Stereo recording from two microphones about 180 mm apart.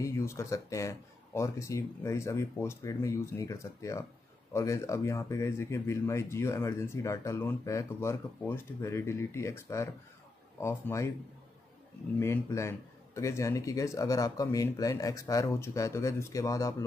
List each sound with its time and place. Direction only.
0.0 s speech: 15° left (ahead or behind)
12.2 s speech: 15° left (ahead or behind)